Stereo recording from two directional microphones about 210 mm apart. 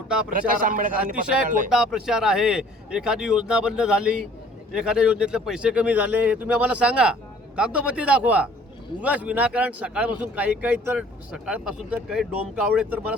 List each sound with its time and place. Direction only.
0.3 s a man's voice: 40° right (ahead or behind)
1.7 s a man's voice: 5° right (ahead or behind)